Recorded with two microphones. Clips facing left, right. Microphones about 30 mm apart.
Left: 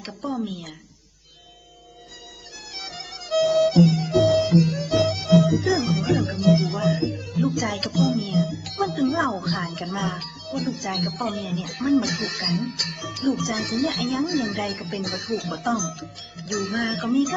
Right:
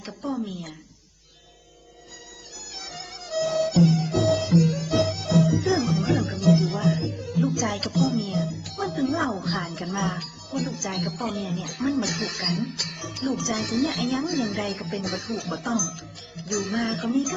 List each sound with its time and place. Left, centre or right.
0.4 s speech: left
2.7 s music: left
4.4 s music: left
5.0 s music: left
8.6 s speech: left
9.6 s speech: left
10.7 s speech: left
12.5 s speech: left
12.9 s speech: left
14.1 s speech: left
14.8 s speech: left
15.7 s speech: left
16.5 s speech: left